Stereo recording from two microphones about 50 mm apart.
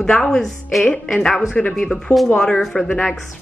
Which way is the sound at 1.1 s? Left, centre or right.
Centre.